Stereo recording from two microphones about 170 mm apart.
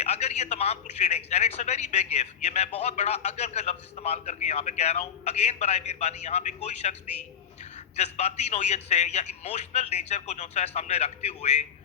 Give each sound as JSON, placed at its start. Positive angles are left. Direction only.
{"t": 0.0, "sound": "a man's voice", "side_deg": 40}
{"t": 7.9, "sound": "a man's voice", "side_deg": 40}